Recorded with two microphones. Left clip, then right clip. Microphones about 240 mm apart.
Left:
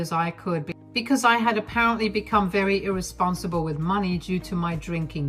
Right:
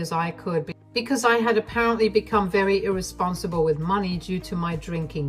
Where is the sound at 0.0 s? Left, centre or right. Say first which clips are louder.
Even; left.